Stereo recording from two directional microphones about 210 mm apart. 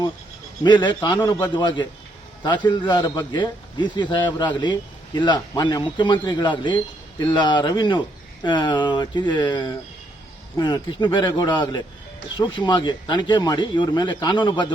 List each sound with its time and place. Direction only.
0.6 s a man's voice: 20° left (ahead or behind)